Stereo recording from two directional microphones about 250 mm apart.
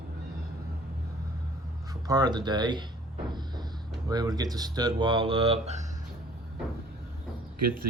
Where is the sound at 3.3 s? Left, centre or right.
Centre.